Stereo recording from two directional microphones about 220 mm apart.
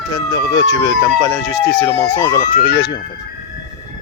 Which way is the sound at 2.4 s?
45° left (ahead or behind).